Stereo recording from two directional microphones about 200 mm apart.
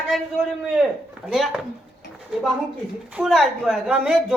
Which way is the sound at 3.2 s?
Centre (ahead or behind).